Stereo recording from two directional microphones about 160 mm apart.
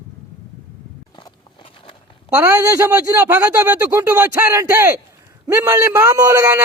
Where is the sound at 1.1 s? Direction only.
35° left (ahead or behind).